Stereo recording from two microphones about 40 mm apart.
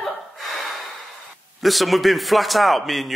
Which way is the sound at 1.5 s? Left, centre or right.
Centre.